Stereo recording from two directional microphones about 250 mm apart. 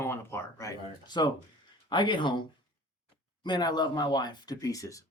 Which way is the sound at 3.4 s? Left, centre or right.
Centre.